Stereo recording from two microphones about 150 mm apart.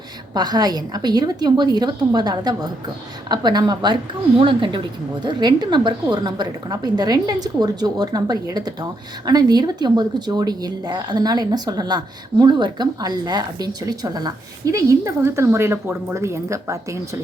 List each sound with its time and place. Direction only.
0.3 s a woman's voice: 25° right (ahead or behind)